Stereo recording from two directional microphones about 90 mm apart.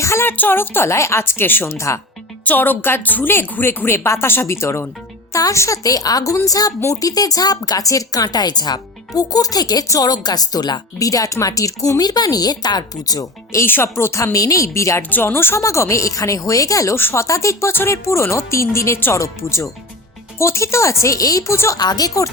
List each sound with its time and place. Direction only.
0.0 s a woman's voice: 30° left (ahead or behind)
2.4 s a woman's voice: 20° left (ahead or behind); by 13.7 s 40° left (ahead or behind)
13.7 s a woman's voice: 25° left (ahead or behind)
17.0 s a woman's voice: 25° left (ahead or behind)
17.2 s speech: 35° left (ahead or behind)
21.8 s speech: 50° left (ahead or behind)